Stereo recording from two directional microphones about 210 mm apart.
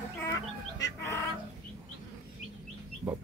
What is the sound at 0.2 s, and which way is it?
Chicken, 15° left (ahead or behind).